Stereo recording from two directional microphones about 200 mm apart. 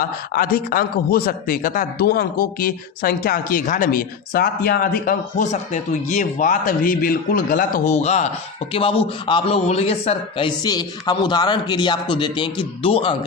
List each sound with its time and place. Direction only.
0.0 s a man's voice: 45° left (ahead or behind); by 13.1 s 25° left (ahead or behind)